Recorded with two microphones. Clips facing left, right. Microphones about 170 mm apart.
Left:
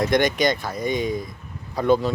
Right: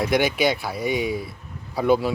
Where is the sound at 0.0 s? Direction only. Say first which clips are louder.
Left 1 dB; 5° right (ahead or behind).